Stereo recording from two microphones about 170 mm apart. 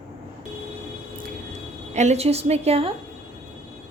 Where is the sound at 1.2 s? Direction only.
45° right (ahead or behind).